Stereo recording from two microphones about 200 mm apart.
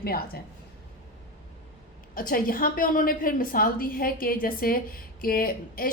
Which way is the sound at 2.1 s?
45° left (ahead or behind).